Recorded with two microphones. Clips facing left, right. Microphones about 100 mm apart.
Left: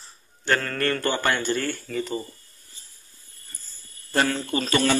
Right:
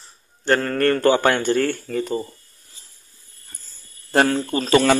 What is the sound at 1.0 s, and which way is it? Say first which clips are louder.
Speech: right 7 dB; 70° right (ahead or behind).